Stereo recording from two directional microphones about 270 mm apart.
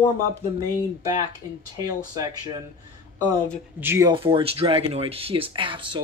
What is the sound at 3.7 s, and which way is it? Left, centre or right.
Speech, centre.